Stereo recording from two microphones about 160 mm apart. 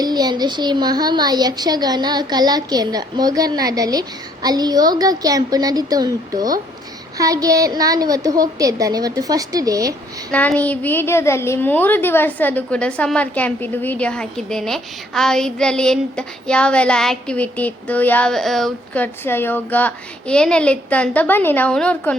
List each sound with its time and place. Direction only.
0.0 s a child's voice: 25° right (ahead or behind)
10.6 s a child's voice: 10° left (ahead or behind)